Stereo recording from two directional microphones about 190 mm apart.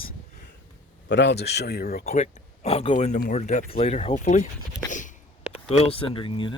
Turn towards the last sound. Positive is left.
turn(degrees=25)  # may be behind; listen again after turning